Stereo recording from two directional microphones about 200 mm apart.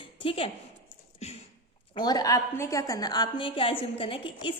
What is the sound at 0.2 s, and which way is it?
Speech, 25° left (ahead or behind).